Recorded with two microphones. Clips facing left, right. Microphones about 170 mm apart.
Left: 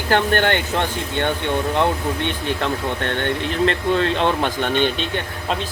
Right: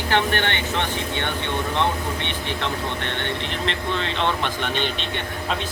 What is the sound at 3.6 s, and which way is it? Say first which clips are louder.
Speech: left 8 dB; 45° left (ahead or behind).